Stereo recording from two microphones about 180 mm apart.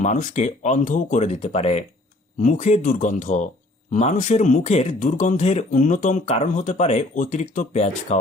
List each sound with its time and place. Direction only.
0.0 s speech: 45° left (ahead or behind)